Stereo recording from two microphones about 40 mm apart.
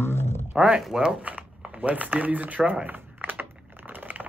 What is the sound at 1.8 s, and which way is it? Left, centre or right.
Speech, right.